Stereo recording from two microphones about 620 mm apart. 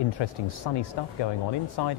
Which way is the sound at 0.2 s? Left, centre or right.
Left.